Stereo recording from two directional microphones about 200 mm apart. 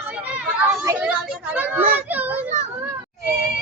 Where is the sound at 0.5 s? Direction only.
10° right (ahead or behind).